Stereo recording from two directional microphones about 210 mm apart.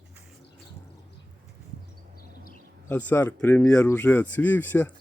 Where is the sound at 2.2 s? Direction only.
45° left (ahead or behind).